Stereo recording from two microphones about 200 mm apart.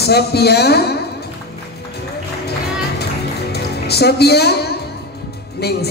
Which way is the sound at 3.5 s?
55° left (ahead or behind).